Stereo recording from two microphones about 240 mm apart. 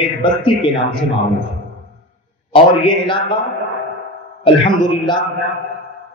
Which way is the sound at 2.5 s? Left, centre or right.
Centre.